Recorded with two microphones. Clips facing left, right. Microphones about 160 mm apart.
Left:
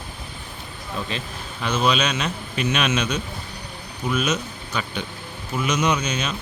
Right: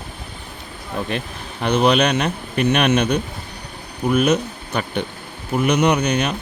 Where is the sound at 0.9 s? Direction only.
60° right (ahead or behind).